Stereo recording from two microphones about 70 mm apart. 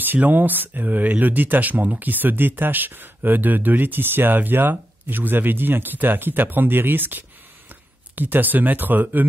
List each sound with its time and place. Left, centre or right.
0.0 s speech: right